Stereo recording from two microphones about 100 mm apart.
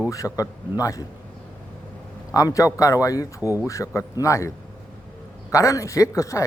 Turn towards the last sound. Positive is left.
turn(degrees=30)  # may be behind; listen again after turning